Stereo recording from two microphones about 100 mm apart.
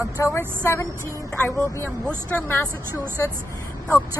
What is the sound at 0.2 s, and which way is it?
Speech, 30° left (ahead or behind).